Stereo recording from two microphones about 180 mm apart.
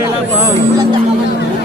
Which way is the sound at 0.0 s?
15° right (ahead or behind).